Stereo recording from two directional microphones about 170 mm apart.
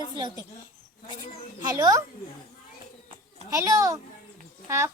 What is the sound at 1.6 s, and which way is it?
Speech, 20° right (ahead or behind).